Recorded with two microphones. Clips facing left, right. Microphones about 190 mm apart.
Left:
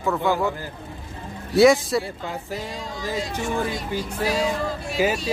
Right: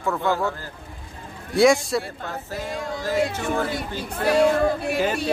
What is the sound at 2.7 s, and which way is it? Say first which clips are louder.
Speech: right 7 dB; 55° right (ahead or behind).